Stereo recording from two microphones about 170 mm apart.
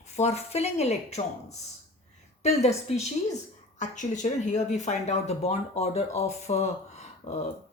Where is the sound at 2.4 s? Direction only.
40° left (ahead or behind).